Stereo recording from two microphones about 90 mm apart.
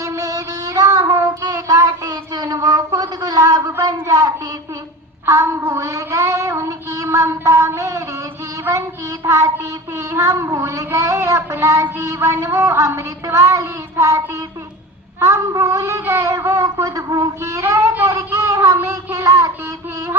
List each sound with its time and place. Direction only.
0.0 s child singing: 35° right (ahead or behind)
4.1 s speech: 45° right (ahead or behind)
5.2 s child singing: 35° right (ahead or behind)
7.8 s speech: 35° right (ahead or behind)
8.7 s child singing: 25° right (ahead or behind)
9.2 s speech: 35° right (ahead or behind)
15.2 s speech: 35° right (ahead or behind)
18.1 s a sound: 35° right (ahead or behind)
18.9 s child singing: 35° right (ahead or behind)